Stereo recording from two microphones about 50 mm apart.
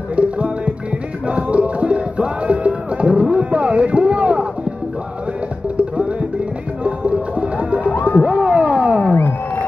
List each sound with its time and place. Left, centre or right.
0.2 s music: right
6.8 s music: right
7.8 s music: left
8.5 s a sound: right